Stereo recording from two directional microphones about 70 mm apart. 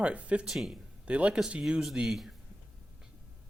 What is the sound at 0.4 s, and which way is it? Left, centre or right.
Speech, centre.